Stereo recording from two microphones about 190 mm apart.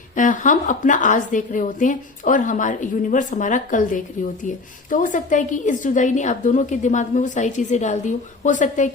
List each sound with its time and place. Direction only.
0.2 s a woman's voice: 40° left (ahead or behind)